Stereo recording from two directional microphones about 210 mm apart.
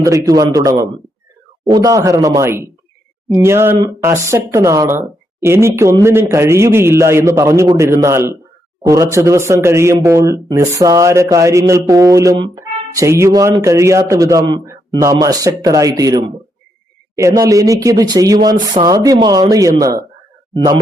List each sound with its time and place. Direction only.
0.0 s speech: 15° right (ahead or behind)